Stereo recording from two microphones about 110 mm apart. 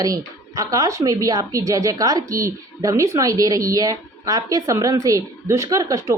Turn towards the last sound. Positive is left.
turn(degrees=-30)  # may be behind; listen again after turning